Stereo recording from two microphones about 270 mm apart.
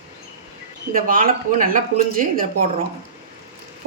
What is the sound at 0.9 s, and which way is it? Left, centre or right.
A woman's voice, right.